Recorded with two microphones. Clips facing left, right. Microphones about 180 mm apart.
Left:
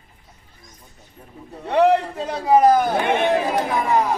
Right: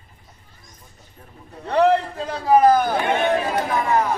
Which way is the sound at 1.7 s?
15° left (ahead or behind).